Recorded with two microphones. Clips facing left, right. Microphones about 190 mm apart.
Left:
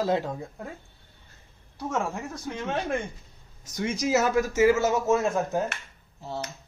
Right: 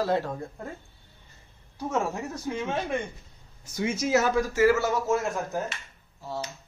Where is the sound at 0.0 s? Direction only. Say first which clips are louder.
Even; 10° left (ahead or behind).